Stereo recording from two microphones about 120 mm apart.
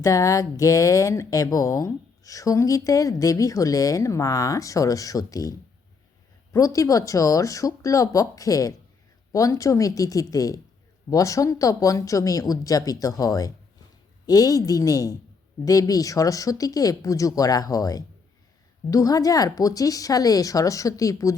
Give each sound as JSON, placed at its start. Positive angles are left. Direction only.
{"t": 0.0, "sound": "a woman's voice", "side_deg": 25}